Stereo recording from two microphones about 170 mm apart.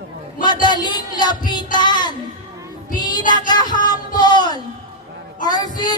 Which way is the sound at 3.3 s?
25° left (ahead or behind).